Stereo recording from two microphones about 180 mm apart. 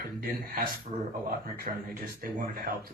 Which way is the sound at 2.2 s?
55° right (ahead or behind).